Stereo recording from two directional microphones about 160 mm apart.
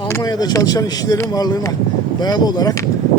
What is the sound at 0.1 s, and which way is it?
Speech, 25° left (ahead or behind).